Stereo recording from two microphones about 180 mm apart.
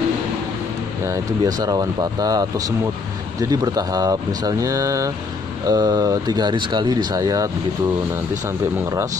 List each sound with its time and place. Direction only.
1.0 s speech: 20° right (ahead or behind)